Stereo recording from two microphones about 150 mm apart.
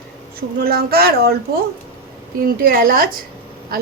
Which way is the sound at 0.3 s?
90° right.